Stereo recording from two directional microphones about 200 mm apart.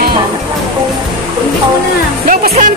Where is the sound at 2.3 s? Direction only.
40° right (ahead or behind).